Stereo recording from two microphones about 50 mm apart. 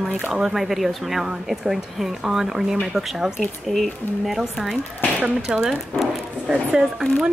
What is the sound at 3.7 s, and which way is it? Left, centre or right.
Speech, centre.